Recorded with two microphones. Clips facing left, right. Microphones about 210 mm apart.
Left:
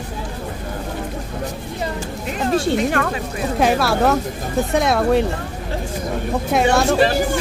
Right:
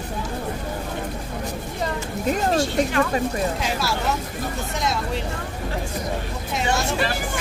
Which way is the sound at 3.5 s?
60° left (ahead or behind).